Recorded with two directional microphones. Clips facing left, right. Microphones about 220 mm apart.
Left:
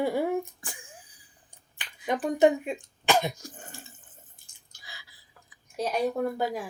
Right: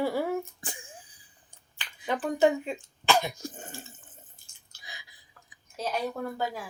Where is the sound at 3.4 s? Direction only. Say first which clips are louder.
Right 5 dB; 25° right (ahead or behind).